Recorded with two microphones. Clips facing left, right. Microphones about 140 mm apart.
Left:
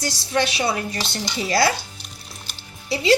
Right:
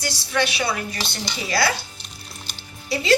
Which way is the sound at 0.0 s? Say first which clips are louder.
Left 1 dB; 40° left (ahead or behind).